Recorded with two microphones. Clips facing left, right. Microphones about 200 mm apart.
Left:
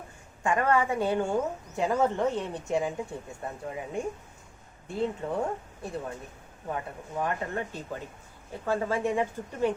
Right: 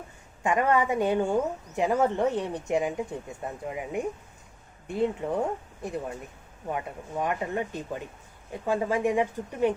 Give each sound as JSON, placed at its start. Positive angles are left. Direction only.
{"t": 0.4, "sound": "a woman's voice", "side_deg": -20}